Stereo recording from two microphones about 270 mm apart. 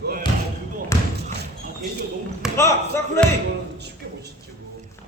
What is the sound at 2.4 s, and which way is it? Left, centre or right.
Basketball bounce, centre.